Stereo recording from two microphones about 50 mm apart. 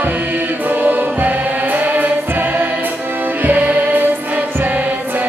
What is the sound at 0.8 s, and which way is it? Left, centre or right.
Music, right.